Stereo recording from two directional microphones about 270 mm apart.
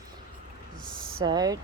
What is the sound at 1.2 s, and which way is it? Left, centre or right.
Speech, centre.